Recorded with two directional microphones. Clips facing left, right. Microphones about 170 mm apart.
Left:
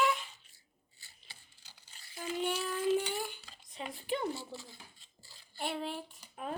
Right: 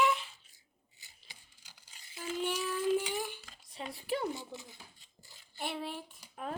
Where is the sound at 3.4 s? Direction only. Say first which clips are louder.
Even; 15° left (ahead or behind).